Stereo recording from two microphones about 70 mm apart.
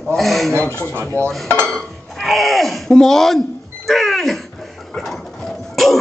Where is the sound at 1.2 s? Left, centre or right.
Right.